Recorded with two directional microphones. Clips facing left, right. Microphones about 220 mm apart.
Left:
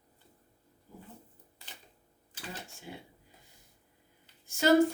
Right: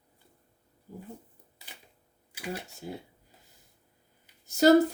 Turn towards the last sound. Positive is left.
turn(degrees=-40)  # may be behind; listen again after turning